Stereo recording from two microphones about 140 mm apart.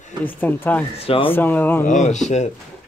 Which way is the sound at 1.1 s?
40° left (ahead or behind).